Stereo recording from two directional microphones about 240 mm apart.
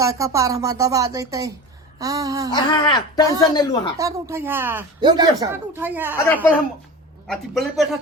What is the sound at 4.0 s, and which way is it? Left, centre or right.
Speech, centre.